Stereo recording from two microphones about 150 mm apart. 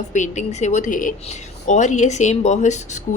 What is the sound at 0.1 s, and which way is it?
Speech, 55° left (ahead or behind).